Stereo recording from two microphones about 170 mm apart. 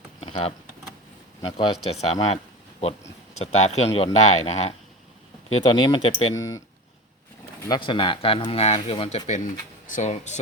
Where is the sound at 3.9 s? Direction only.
35° left (ahead or behind).